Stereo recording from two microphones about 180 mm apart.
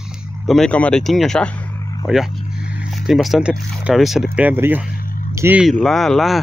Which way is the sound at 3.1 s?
Centre (ahead or behind).